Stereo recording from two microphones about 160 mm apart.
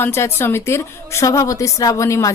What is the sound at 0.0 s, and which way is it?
A woman's voice, 15° left (ahead or behind).